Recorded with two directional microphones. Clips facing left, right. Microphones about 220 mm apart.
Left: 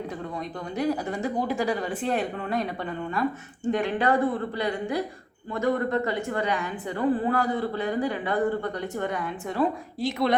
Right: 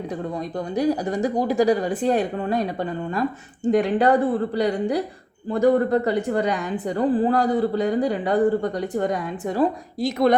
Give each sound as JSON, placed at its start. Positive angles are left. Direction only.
{"t": 0.8, "sound": "a man's voice", "side_deg": -40}
{"t": 3.8, "sound": "a man's voice", "side_deg": -35}